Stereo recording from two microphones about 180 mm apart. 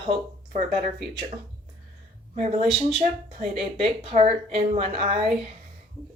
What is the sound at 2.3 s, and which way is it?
Speech, 35° right (ahead or behind).